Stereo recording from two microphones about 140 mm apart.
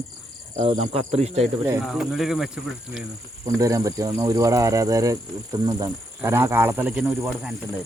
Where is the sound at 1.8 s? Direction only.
5° right (ahead or behind).